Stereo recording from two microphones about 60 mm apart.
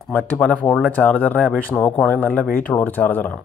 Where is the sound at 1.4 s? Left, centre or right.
Centre.